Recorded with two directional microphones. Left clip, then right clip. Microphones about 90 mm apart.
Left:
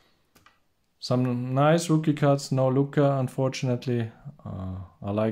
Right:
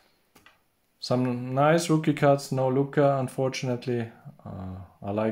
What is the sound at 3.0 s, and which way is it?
Speech, 25° left (ahead or behind).